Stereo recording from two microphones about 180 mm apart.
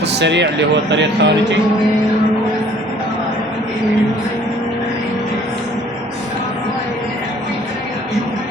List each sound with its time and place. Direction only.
0.1 s speech: 75° right (ahead or behind)